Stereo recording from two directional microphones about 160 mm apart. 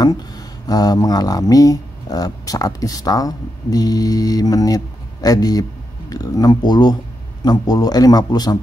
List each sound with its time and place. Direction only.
0.0 s speech: 25° left (ahead or behind)